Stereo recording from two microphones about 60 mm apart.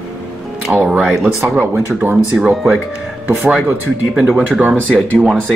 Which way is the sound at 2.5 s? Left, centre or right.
Centre.